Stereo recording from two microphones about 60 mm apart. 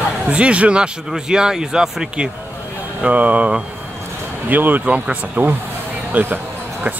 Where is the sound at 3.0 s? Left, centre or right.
Right.